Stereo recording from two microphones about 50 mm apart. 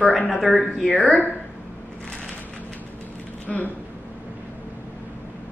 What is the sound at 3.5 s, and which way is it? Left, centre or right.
Speech, left.